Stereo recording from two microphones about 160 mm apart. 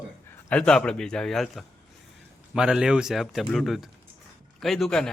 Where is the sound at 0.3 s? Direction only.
5° left (ahead or behind).